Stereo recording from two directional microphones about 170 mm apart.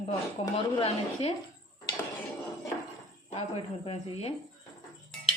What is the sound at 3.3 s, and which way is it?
Speech, 35° left (ahead or behind).